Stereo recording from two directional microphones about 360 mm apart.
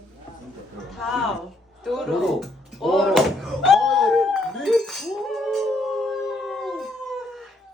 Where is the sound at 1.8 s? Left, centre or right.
Centre.